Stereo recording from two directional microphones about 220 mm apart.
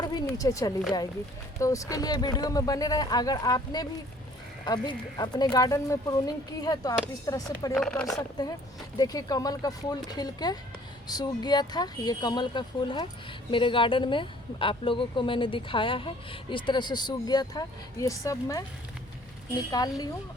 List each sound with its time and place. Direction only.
0.0 s a sound: 20° left (ahead or behind)
1.5 s speech: 15° left (ahead or behind)
7.8 s speech: centre (ahead or behind)
8.1 s speech: 15° left (ahead or behind)
19.7 s speech: 15° left (ahead or behind)